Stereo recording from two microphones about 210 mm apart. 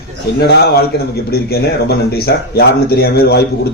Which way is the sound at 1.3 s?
50° left (ahead or behind).